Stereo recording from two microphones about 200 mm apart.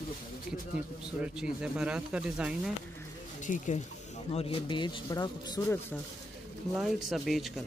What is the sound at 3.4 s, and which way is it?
Speech, 40° left (ahead or behind).